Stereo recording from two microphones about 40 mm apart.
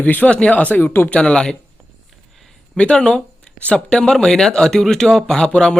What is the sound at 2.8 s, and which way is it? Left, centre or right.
Speech, left.